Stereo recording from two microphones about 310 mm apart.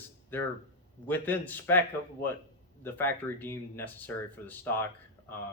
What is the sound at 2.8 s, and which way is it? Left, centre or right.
Speech, centre.